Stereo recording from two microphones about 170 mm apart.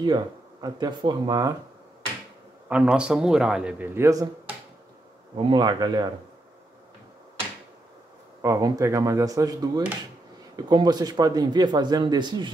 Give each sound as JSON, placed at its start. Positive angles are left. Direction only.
{"t": 0.0, "sound": "a man's voice", "side_deg": -25}
{"t": 2.7, "sound": "a man's voice", "side_deg": -5}
{"t": 5.3, "sound": "a man's voice", "side_deg": -30}
{"t": 8.4, "sound": "a man's voice", "side_deg": -20}